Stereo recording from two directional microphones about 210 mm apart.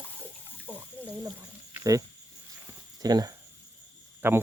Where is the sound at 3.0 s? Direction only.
20° right (ahead or behind).